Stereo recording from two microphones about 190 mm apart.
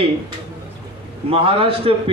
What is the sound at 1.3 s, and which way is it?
Speech, 30° right (ahead or behind).